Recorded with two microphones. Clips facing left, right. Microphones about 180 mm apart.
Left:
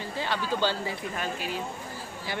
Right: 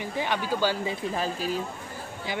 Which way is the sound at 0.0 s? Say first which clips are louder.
Right 2 dB; 15° right (ahead or behind).